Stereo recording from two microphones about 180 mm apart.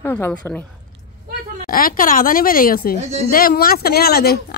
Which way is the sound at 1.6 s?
55° left (ahead or behind).